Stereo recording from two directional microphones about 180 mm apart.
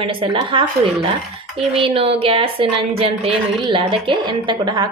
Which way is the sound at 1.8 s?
35° right (ahead or behind).